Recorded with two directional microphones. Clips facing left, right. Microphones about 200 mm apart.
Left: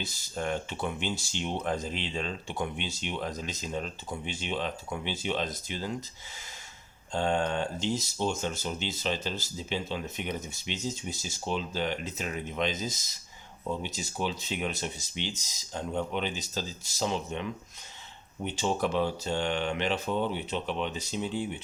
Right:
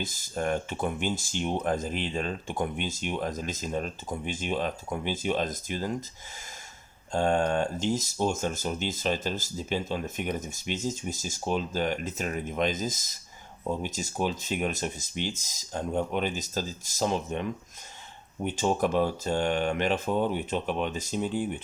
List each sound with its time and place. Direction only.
0.0 s speech: 45° right (ahead or behind)
7.1 s speech: 50° right (ahead or behind)